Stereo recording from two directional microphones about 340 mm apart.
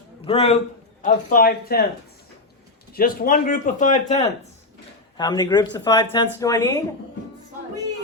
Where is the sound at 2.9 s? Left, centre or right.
Left; by 6.8 s centre.